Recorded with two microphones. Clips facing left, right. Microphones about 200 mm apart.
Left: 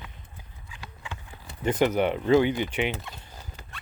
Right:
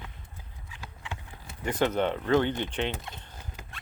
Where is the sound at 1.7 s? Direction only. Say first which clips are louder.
Left 3 dB; 15° left (ahead or behind).